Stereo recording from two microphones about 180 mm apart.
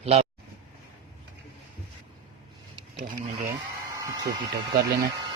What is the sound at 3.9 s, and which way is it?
Speech, 20° right (ahead or behind).